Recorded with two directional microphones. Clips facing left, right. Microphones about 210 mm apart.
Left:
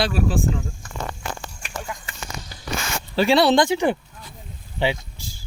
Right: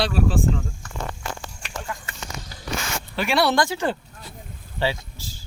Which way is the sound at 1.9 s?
15° left (ahead or behind).